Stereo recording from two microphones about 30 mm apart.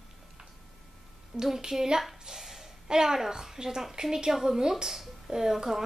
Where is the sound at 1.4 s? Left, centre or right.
Centre.